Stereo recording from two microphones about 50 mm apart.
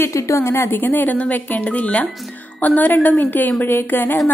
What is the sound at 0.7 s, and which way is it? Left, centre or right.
Speech, left.